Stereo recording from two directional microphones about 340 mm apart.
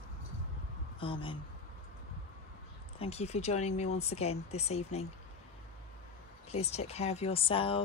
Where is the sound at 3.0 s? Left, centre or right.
Centre.